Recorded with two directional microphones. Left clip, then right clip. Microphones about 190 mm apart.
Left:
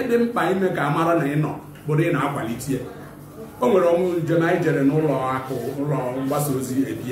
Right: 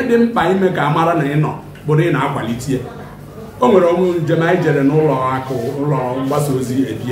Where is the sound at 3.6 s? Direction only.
10° right (ahead or behind).